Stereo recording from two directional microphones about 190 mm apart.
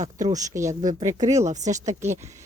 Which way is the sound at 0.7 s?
40° right (ahead or behind).